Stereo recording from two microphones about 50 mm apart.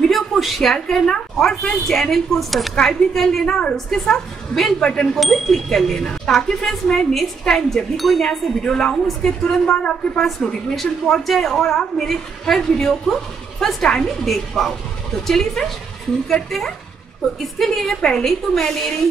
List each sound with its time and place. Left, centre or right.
0.0 s a sound: centre
0.7 s a woman's voice: centre
3.4 s a woman's voice: centre
3.7 s a woman's voice: centre
10.7 s a woman's voice: centre